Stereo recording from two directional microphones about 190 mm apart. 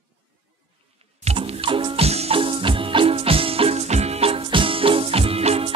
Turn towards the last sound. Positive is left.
turn(degrees=-30)  # may be behind; listen again after turning